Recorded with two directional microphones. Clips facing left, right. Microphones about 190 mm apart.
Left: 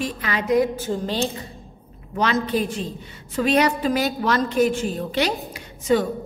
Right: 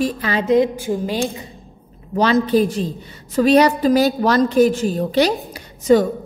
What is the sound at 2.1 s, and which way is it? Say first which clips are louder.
A woman's voice: right 7 dB; 35° right (ahead or behind).